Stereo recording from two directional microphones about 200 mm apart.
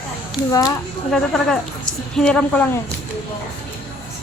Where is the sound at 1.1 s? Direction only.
Centre (ahead or behind).